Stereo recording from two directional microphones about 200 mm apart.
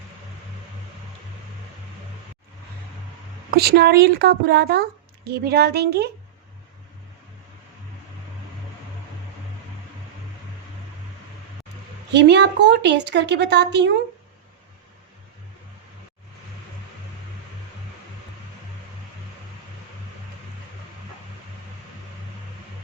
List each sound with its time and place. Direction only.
3.5 s a child's voice: 50° right (ahead or behind)
12.1 s a woman's voice: 60° right (ahead or behind)